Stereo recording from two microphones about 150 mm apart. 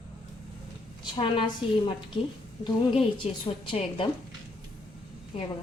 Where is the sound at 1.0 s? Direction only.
35° left (ahead or behind).